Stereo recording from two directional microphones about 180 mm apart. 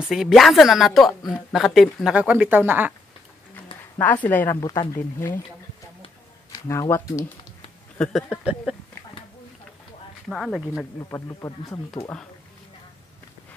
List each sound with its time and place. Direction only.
0.1 s a woman's voice: centre (ahead or behind)
4.0 s speech: 10° left (ahead or behind)
4.6 s speech: 20° left (ahead or behind)
6.5 s speech: 15° left (ahead or behind)
8.0 s a woman's voice: centre (ahead or behind)
10.3 s a woman's voice: centre (ahead or behind)
10.7 s speech: 15° left (ahead or behind)